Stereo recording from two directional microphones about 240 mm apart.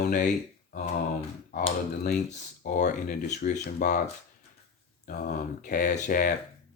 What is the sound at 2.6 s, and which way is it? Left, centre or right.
Speech, left.